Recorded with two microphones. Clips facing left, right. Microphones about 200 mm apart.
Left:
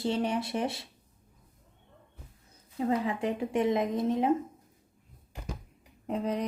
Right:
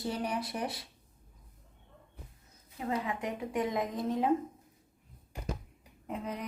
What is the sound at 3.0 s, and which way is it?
Speech, 30° left (ahead or behind).